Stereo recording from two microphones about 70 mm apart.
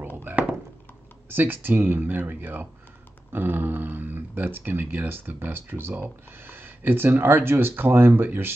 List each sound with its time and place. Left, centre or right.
0.2 s thunk: right
1.3 s speech: right